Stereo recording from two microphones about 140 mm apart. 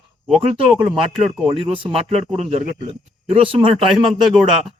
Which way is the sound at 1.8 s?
45° right (ahead or behind).